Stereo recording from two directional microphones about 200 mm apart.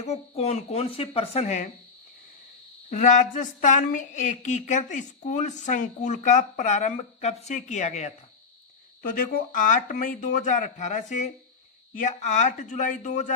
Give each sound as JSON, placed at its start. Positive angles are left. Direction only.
{"t": 0.0, "sound": "speech", "side_deg": 35}
{"t": 2.9, "sound": "speech", "side_deg": 40}
{"t": 9.0, "sound": "speech", "side_deg": 45}